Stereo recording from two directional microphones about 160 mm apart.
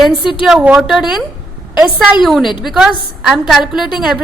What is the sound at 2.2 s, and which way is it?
A woman's voice, centre (ahead or behind).